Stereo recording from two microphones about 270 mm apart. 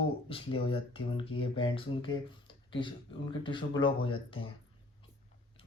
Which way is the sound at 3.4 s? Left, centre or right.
Centre.